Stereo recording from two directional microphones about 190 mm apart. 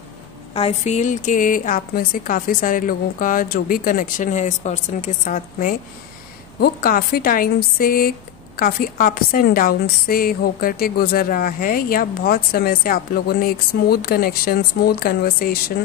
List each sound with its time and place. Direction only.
0.6 s a woman's voice: 35° left (ahead or behind); by 15.6 s 50° left (ahead or behind)